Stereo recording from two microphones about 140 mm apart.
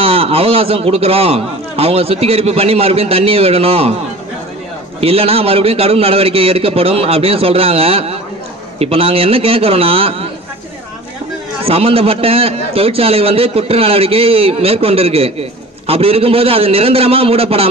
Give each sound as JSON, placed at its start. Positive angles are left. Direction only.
{"t": 0.0, "sound": "a man's voice", "side_deg": -45}
{"t": 5.0, "sound": "a man's voice", "side_deg": -45}
{"t": 11.6, "sound": "a man's voice", "side_deg": -45}